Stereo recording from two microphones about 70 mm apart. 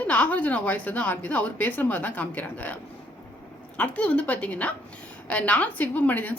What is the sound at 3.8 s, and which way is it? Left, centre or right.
A woman's voice, left.